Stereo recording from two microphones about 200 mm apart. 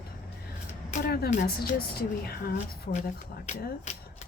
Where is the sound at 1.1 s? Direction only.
50° left (ahead or behind).